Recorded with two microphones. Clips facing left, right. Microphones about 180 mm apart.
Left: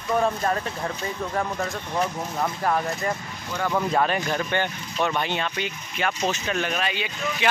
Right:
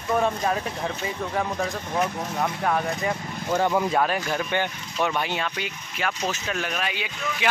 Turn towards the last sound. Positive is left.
turn(degrees=-10)  # may be behind; listen again after turning